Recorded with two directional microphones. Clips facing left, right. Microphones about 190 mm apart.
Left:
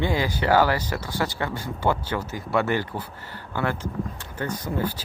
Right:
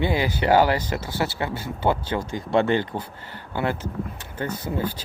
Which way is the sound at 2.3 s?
25° right (ahead or behind).